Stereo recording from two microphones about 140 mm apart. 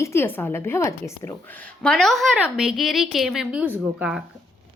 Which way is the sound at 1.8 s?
5° left (ahead or behind).